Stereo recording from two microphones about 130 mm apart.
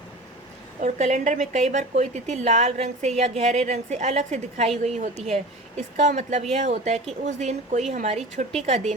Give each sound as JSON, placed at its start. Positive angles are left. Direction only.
{"t": 0.8, "sound": "speech", "side_deg": -70}